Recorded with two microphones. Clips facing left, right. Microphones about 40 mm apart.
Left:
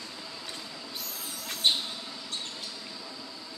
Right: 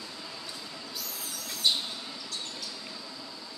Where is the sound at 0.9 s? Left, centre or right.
Left.